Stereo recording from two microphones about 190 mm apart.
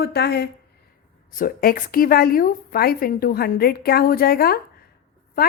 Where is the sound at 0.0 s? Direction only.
60° left (ahead or behind).